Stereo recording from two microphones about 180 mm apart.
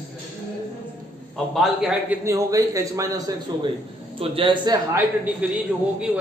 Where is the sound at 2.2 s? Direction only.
20° right (ahead or behind).